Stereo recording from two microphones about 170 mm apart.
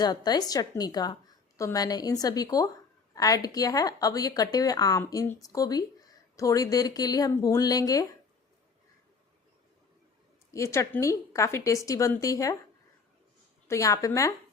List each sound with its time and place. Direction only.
0.0 s speech: 25° left (ahead or behind)
10.5 s a woman's voice: 15° left (ahead or behind)
13.7 s speech: 20° left (ahead or behind)